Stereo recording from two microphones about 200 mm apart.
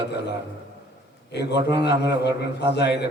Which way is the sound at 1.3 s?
55° left (ahead or behind).